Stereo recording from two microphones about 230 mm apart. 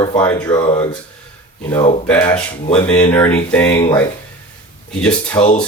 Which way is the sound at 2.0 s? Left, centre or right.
Centre.